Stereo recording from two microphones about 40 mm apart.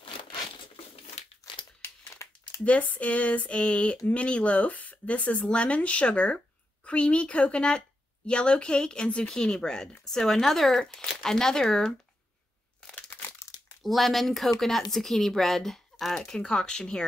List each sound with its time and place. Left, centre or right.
1.8 s crumpling: left
2.6 s a woman's voice: left
9.4 s speech: centre
12.8 s crunch: left
13.8 s speech: centre; by 17.0 s left